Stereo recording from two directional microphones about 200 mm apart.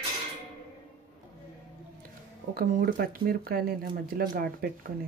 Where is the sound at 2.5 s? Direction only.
45° right (ahead or behind).